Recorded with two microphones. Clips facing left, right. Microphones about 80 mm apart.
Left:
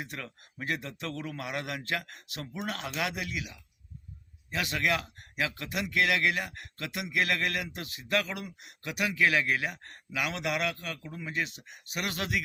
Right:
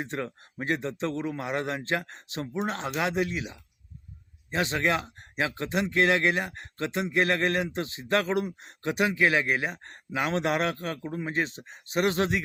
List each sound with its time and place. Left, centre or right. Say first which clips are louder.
0.0 s speech: right 8 dB; right